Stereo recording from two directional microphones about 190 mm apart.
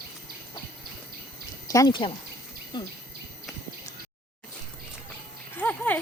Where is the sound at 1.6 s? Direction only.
20° left (ahead or behind).